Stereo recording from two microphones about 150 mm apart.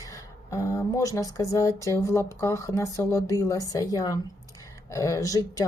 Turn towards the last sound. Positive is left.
turn(degrees=25)  # may be behind; listen again after turning